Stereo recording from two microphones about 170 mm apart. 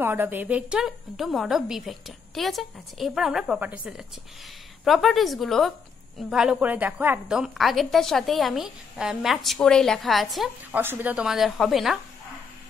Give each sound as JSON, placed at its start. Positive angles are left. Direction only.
{"t": 0.0, "sound": "a woman's voice", "side_deg": -10}
{"t": 10.8, "sound": "a woman's voice", "side_deg": -10}